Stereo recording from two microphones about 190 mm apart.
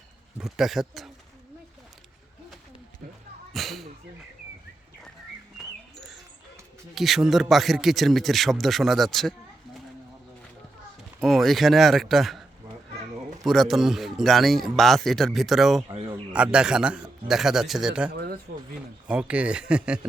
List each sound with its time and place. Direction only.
0.3 s a man's voice: 5° right (ahead or behind)
3.5 s a sound: centre (ahead or behind)
6.9 s a man's voice: centre (ahead or behind)
11.2 s a man's voice: centre (ahead or behind)
13.4 s a man's voice: centre (ahead or behind)
15.9 s a sound: 30° right (ahead or behind)
16.3 s a man's voice: 5° right (ahead or behind)
18.1 s a sound: 55° right (ahead or behind)
19.0 s a man's voice: 5° right (ahead or behind)